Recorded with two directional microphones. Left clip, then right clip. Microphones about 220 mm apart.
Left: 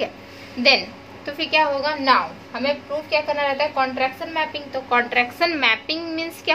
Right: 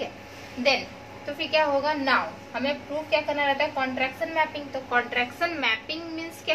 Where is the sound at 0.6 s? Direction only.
45° left (ahead or behind).